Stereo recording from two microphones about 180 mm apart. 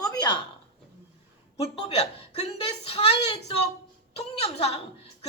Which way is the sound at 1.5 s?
35° left (ahead or behind).